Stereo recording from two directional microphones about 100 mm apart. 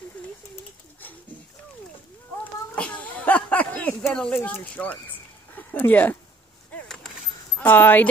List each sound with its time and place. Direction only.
2.4 s a sound: 15° left (ahead or behind)
4.0 s speech: 5° left (ahead or behind)
7.5 s speech: 20° left (ahead or behind)